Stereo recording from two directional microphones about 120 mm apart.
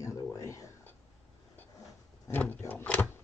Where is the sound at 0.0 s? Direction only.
25° left (ahead or behind).